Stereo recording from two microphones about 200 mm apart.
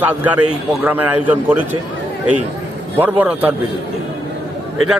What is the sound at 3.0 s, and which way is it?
Speech, 10° right (ahead or behind).